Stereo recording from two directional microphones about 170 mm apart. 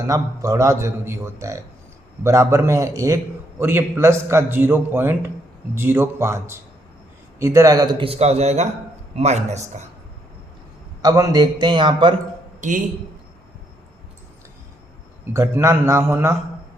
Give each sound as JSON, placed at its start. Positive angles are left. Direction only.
{"t": 0.1, "sound": "a man's voice", "side_deg": -20}
{"t": 11.0, "sound": "a man's voice", "side_deg": -25}
{"t": 12.6, "sound": "a man's voice", "side_deg": -45}
{"t": 15.3, "sound": "a man's voice", "side_deg": -15}